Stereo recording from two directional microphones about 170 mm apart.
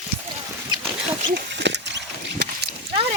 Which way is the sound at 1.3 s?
90° right.